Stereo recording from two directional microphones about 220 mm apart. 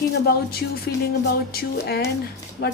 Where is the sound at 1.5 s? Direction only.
45° left (ahead or behind).